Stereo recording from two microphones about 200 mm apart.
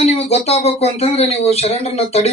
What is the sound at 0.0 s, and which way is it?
Speech, 30° left (ahead or behind).